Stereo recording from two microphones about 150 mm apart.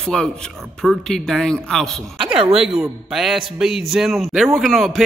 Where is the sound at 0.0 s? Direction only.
5° left (ahead or behind).